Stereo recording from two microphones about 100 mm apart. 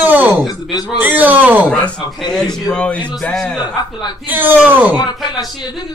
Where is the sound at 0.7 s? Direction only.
45° left (ahead or behind).